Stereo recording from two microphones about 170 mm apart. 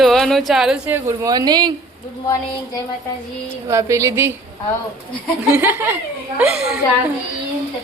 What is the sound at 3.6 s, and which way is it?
Speech, 15° right (ahead or behind).